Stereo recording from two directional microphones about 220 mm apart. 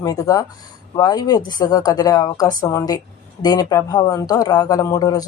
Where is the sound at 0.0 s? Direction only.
15° left (ahead or behind).